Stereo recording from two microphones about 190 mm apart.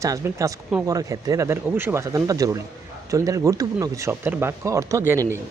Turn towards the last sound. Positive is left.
turn(degrees=-15)  # may be behind; listen again after turning